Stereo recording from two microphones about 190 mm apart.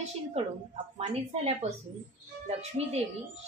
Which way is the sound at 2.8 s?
35° right (ahead or behind).